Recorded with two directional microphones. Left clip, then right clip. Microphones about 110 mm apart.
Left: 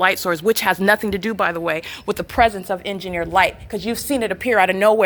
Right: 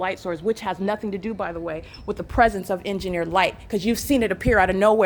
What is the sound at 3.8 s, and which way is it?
Speech, 50° right (ahead or behind).